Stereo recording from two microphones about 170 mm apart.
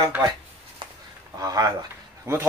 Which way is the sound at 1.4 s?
20° right (ahead or behind).